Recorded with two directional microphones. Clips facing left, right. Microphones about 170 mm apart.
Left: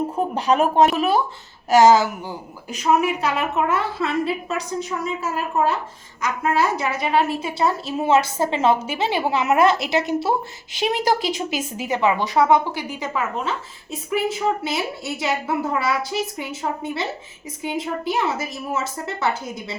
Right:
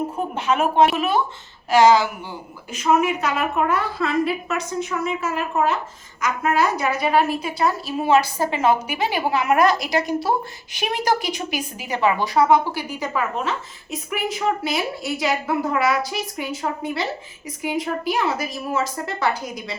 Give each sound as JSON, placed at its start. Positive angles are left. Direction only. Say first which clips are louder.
{"t": 0.3, "sound": "a woman's voice", "louder": "left 1 dB", "side_deg": 35}